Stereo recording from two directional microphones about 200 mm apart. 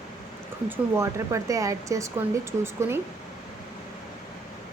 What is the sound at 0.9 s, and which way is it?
Speech, 15° right (ahead or behind).